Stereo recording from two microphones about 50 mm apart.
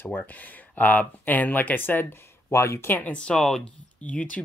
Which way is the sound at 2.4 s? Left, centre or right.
Left.